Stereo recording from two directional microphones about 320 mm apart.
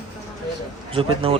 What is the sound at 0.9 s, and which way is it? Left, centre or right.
Speech, centre.